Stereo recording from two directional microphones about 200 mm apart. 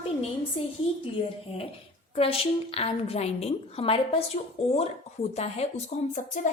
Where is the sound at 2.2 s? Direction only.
30° left (ahead or behind).